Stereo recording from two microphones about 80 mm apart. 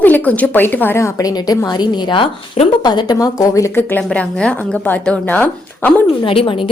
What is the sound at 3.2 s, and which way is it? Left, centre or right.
Speech, left.